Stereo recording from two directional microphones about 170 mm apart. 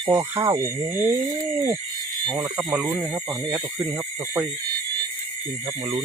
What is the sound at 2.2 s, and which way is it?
Speech, 25° right (ahead or behind).